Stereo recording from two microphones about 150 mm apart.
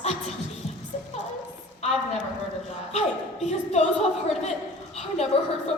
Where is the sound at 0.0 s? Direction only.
45° left (ahead or behind).